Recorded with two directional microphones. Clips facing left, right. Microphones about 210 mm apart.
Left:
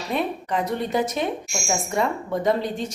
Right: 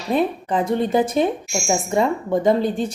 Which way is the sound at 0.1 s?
35° right (ahead or behind).